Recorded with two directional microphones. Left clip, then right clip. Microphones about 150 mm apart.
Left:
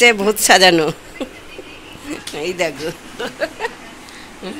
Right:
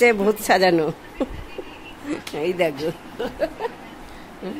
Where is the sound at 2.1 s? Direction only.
25° right (ahead or behind).